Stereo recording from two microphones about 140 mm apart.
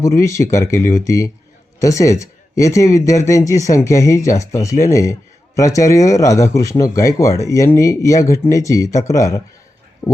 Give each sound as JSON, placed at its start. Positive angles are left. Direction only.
{"t": 0.0, "sound": "speech", "side_deg": 20}